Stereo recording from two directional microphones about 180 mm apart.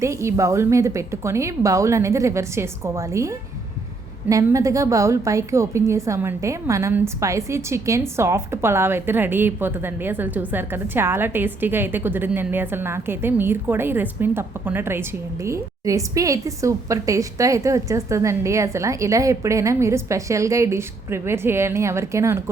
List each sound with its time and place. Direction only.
0.0 s a woman's voice: 15° right (ahead or behind)